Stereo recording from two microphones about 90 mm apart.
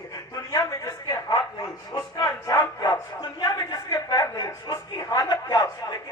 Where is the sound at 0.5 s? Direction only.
40° left (ahead or behind).